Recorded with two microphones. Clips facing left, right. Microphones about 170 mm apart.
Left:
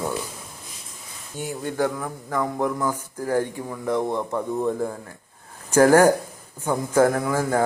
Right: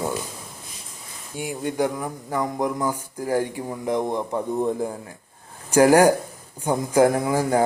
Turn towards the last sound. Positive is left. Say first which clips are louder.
# right 2 dB
turn(degrees=-15)  # may be behind; listen again after turning